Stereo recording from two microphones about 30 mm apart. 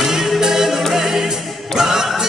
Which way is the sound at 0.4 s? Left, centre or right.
Centre.